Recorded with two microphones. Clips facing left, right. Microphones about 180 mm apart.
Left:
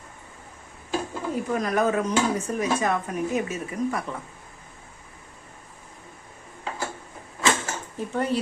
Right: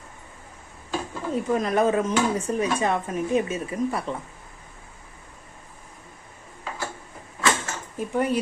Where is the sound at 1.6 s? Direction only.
25° right (ahead or behind).